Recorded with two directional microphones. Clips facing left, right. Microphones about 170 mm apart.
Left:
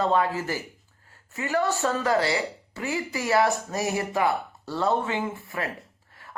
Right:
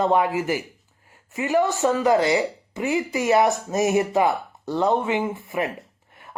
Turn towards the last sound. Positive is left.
turn(degrees=-20)  # may be behind; listen again after turning